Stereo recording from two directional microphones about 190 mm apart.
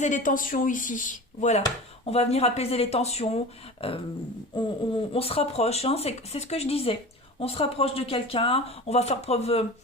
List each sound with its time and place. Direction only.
0.0 s speech: 40° left (ahead or behind)